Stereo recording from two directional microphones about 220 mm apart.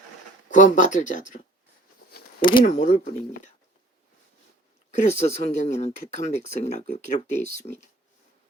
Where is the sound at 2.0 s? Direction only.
45° left (ahead or behind).